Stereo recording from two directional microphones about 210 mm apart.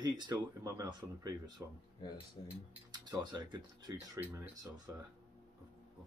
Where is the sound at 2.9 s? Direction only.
20° right (ahead or behind).